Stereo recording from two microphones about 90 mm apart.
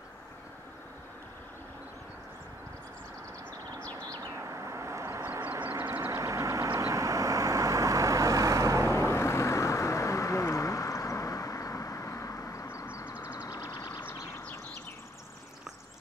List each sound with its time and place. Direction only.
4.1 s bird: 40° right (ahead or behind)
5.4 s vehicle: 25° right (ahead or behind)
8.9 s vehicle: 30° left (ahead or behind)
13.7 s a sound: 45° left (ahead or behind)